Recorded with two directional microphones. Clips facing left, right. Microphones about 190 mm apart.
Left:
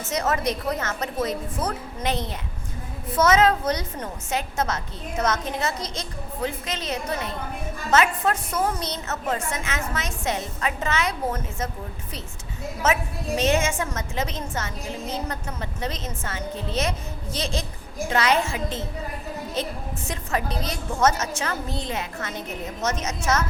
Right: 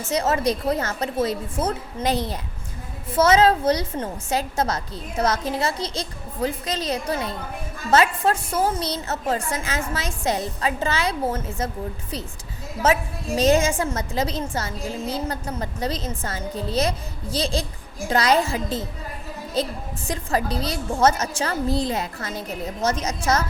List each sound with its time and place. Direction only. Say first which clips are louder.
0.1 s a woman's voice: right 3 dB; 30° right (ahead or behind)
12.8 s a woman's voice: right 3 dB; 35° right (ahead or behind)